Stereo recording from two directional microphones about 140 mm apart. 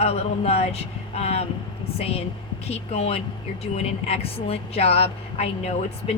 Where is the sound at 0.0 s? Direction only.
50° left (ahead or behind).